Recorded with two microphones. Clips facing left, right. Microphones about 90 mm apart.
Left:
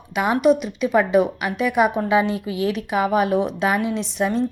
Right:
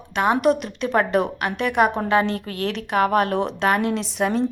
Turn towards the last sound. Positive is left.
turn(degrees=0)  # may be behind; listen again after turning